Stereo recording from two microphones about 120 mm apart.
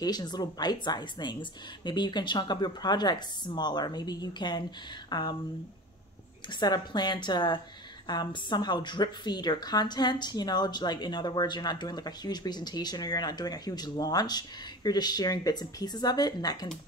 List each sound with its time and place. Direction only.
0.0 s a woman's voice: 35° left (ahead or behind)
6.6 s a woman's voice: 35° left (ahead or behind)